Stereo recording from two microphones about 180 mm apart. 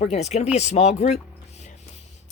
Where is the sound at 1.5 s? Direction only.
40° left (ahead or behind).